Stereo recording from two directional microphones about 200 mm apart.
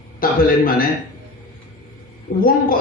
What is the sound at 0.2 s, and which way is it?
Speech, 45° left (ahead or behind).